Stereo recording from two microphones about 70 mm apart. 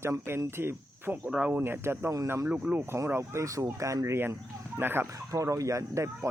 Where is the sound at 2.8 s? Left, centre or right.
Right.